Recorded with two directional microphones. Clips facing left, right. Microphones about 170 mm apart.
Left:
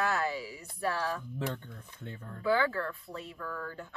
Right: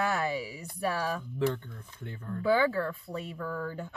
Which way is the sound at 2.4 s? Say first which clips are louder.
Right 3 dB; 15° right (ahead or behind).